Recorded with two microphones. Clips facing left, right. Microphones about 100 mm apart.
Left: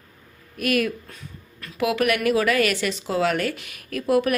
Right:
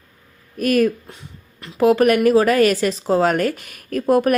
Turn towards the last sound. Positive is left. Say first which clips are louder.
# right 5 dB
turn(degrees=-40)  # may be behind; listen again after turning